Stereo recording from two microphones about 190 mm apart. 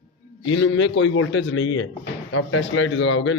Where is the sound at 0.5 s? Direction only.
75° left (ahead or behind).